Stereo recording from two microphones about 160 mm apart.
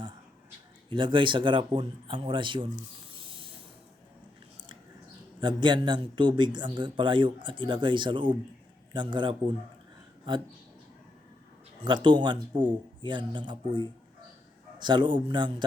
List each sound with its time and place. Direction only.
0.9 s a man's voice: 30° right (ahead or behind)
3.2 s hiss: 35° right (ahead or behind)
5.4 s speech: 30° right (ahead or behind)
12.0 s speech: 30° right (ahead or behind)